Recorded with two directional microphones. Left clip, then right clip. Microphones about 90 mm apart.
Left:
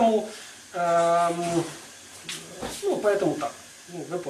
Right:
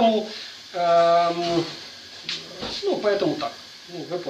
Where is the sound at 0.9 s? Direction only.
5° right (ahead or behind).